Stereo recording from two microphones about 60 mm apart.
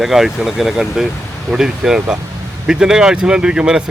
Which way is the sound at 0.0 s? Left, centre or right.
Centre.